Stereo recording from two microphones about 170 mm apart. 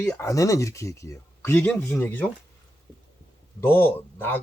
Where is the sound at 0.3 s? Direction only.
20° left (ahead or behind).